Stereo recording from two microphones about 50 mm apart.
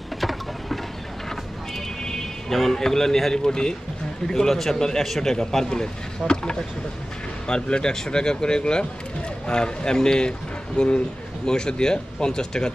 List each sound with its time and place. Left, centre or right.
0.2 s vehicle: centre
2.5 s speech: centre